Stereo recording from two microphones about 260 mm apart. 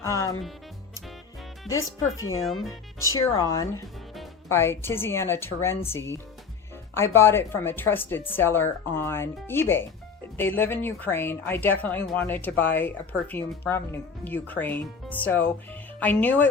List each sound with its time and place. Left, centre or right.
0.0 s music: centre
1.7 s speech: centre
2.0 s speech: left
2.6 s a woman's voice: centre